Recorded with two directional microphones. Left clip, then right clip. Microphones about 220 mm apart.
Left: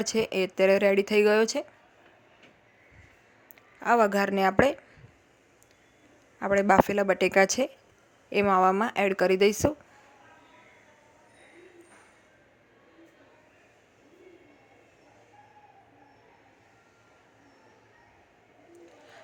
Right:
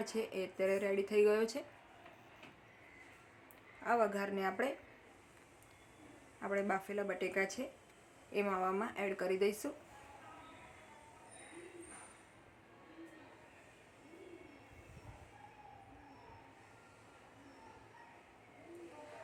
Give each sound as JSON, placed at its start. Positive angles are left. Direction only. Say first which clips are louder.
{"t": 0.0, "sound": "speech", "louder": "left 13 dB", "side_deg": 40}
{"t": 3.8, "sound": "speech", "louder": "left 12 dB", "side_deg": 40}
{"t": 6.4, "sound": "speech", "louder": "left 16 dB", "side_deg": 45}